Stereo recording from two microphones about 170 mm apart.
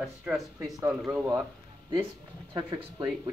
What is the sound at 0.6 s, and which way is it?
Speech, 20° right (ahead or behind).